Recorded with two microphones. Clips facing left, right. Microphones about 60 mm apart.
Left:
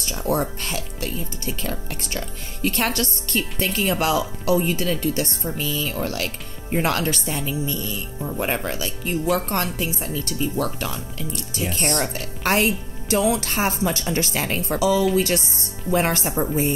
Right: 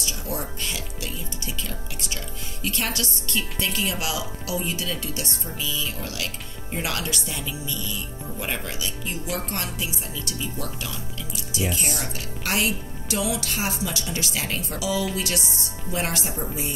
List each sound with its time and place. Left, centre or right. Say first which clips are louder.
0.0 s speech: left 8 dB; left